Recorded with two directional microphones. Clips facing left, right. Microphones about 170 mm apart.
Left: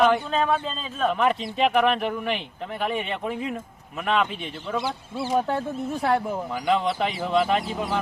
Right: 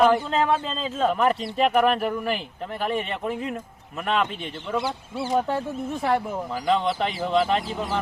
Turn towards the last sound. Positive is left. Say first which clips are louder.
# even
turn(degrees=5)  # may be behind; listen again after turning